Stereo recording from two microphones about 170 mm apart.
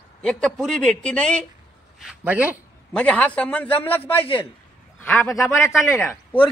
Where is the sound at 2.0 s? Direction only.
5° right (ahead or behind).